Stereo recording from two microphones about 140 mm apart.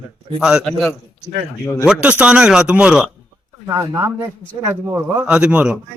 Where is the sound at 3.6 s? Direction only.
25° right (ahead or behind).